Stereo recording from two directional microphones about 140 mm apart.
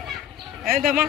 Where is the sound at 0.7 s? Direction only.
90° right.